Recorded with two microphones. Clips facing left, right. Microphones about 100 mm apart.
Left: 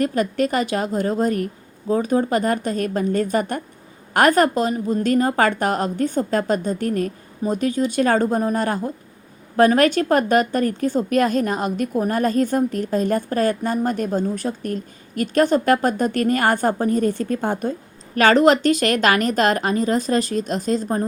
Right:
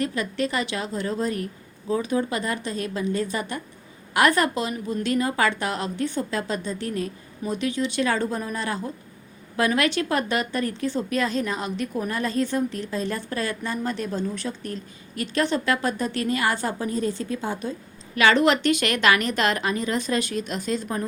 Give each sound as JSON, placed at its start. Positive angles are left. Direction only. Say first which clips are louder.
{"t": 0.0, "sound": "a woman's voice", "louder": "left 6 dB", "side_deg": 45}